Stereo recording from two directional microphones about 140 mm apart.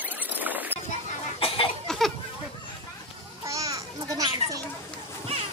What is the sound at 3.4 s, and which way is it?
Children playing, 25° right (ahead or behind).